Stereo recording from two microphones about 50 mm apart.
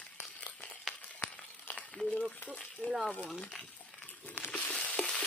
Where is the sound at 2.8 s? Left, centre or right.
Left.